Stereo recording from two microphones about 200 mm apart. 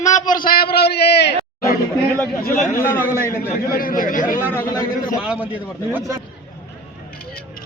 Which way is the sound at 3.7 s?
45° left (ahead or behind).